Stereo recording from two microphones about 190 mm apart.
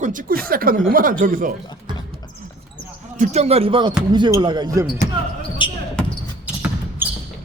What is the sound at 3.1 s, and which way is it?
Speech, 35° right (ahead or behind).